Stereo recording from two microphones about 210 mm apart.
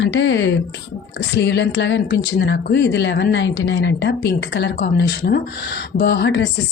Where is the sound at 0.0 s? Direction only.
60° left (ahead or behind).